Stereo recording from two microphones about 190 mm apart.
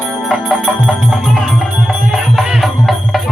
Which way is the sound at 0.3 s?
Centre (ahead or behind).